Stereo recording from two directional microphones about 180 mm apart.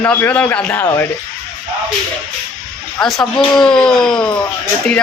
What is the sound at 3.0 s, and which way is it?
Speech, 5° left (ahead or behind).